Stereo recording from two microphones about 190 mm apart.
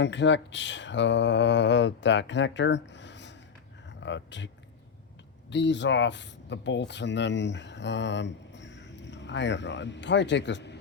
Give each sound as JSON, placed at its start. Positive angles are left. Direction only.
{"t": 0.0, "sound": "speech", "side_deg": 65}
{"t": 5.5, "sound": "speech", "side_deg": 70}